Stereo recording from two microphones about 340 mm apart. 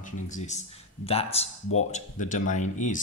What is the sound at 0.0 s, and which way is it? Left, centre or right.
Speech, left.